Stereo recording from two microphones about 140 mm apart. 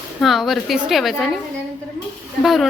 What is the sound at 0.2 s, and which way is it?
Speech, centre (ahead or behind).